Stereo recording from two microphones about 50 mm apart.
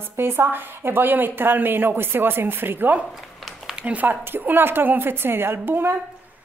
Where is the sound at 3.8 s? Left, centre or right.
Right.